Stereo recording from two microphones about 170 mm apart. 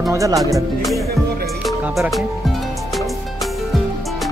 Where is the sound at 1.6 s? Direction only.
Centre (ahead or behind).